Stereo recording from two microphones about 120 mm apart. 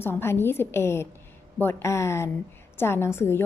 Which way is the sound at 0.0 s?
20° left (ahead or behind).